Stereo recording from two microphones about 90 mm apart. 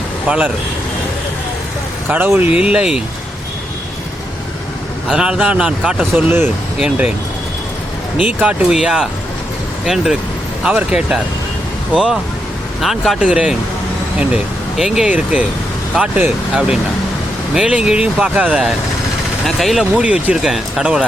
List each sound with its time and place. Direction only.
0.3 s speech: 10° right (ahead or behind)
2.0 s speech: 25° right (ahead or behind)
5.0 s speech: 10° right (ahead or behind)
6.0 s speech: 25° right (ahead or behind)
8.2 s speech: 15° right (ahead or behind)
13.1 s speech: 10° right (ahead or behind)
15.1 s speech: 15° right (ahead or behind)
17.5 s speech: 10° right (ahead or behind)
19.5 s speech: centre (ahead or behind)
20.0 s speech: 15° right (ahead or behind)